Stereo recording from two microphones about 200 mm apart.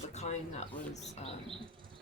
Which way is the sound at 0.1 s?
35° left (ahead or behind).